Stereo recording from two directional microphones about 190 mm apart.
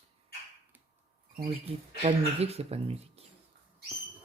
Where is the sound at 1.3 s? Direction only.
25° right (ahead or behind).